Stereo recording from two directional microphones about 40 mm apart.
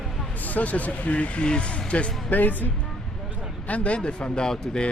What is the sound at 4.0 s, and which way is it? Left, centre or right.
Speech, left.